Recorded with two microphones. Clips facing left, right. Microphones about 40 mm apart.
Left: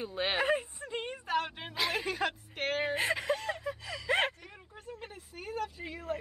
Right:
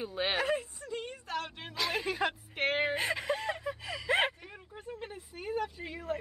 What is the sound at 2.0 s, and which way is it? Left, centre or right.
Speech, centre.